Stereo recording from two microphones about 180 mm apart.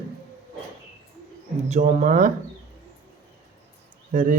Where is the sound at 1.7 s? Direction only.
45° right (ahead or behind).